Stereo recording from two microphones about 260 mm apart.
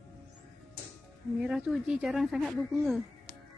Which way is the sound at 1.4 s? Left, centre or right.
Centre.